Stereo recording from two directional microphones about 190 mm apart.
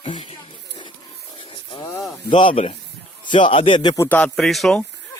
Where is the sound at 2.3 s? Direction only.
25° left (ahead or behind).